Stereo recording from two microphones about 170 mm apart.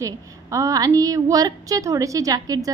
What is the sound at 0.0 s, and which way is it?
A woman's voice, 20° right (ahead or behind).